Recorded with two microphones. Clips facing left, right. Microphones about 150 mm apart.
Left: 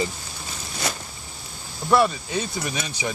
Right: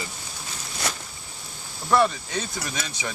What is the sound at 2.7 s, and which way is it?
Speech, 15° left (ahead or behind).